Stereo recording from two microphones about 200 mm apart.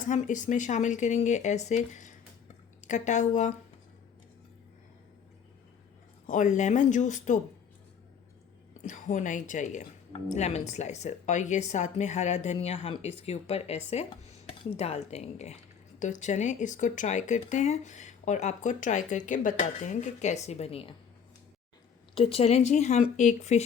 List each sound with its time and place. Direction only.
0.0 s speech: 40° left (ahead or behind)
6.2 s speech: 40° left (ahead or behind)
8.8 s speech: 35° left (ahead or behind)
22.1 s speech: 30° left (ahead or behind)